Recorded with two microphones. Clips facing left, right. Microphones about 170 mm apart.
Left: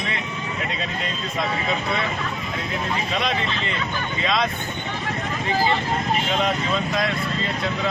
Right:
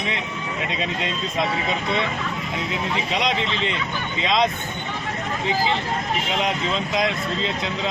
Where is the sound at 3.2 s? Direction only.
20° right (ahead or behind).